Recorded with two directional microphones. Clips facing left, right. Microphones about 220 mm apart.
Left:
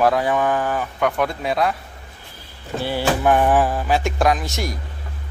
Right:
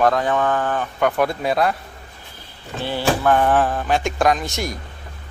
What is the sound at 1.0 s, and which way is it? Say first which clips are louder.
Speech: right 2 dB; centre (ahead or behind).